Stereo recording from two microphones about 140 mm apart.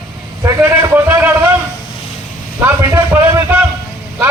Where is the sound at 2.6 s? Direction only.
15° right (ahead or behind).